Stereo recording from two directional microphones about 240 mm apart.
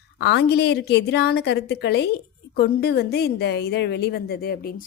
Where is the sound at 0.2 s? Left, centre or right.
Left.